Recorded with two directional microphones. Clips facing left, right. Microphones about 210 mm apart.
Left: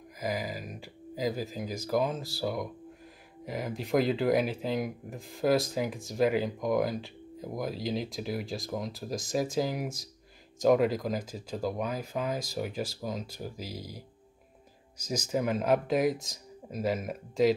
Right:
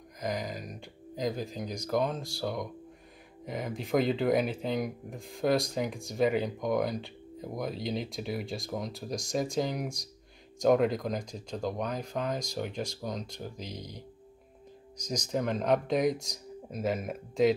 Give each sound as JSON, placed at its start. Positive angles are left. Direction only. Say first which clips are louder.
{"t": 0.2, "sound": "speech", "louder": "left 1 dB", "side_deg": 5}